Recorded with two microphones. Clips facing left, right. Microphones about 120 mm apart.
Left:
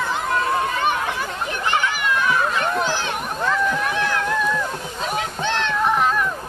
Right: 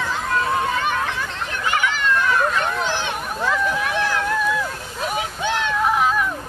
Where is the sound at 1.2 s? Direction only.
20° left (ahead or behind); by 6.3 s 5° right (ahead or behind).